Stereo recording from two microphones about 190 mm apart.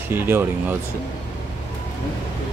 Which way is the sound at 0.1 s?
10° right (ahead or behind).